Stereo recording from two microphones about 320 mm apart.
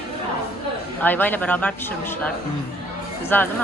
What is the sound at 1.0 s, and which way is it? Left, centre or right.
A man's voice, centre.